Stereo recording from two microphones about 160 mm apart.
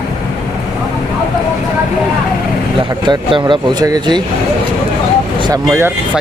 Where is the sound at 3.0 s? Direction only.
30° right (ahead or behind).